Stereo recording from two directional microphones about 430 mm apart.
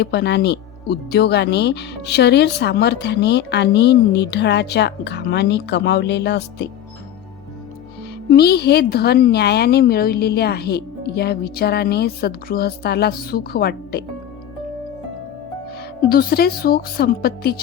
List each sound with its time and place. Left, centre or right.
0.0 s speech: left
8.3 s speech: left
16.0 s speech: left